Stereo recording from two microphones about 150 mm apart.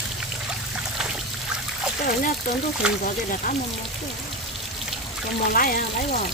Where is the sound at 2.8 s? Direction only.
5° right (ahead or behind).